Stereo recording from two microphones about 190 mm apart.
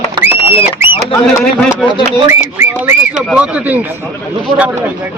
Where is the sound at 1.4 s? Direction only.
5° left (ahead or behind).